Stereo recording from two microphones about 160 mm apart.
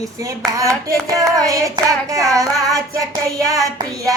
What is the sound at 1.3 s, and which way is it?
Child singing, 20° right (ahead or behind).